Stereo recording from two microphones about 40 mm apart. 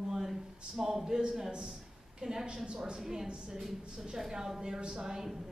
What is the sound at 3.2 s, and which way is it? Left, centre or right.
Speech, right.